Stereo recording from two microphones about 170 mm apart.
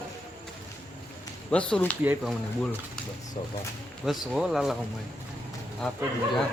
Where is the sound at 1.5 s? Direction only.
5° left (ahead or behind).